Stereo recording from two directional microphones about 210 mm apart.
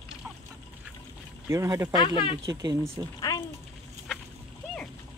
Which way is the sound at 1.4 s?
15° right (ahead or behind).